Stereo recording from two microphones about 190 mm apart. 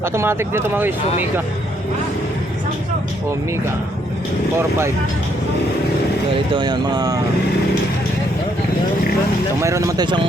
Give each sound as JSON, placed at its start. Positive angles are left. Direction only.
{"t": 0.0, "sound": "speech", "side_deg": -15}
{"t": 6.5, "sound": "speech", "side_deg": -20}
{"t": 9.6, "sound": "speech", "side_deg": -15}